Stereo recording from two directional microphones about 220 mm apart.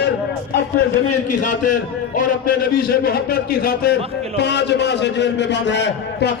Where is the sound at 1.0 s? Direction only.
90° left.